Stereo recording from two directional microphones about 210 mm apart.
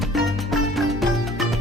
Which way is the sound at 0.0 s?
Centre (ahead or behind).